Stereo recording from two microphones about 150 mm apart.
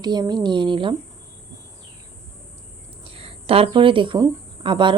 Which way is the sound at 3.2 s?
40° right (ahead or behind).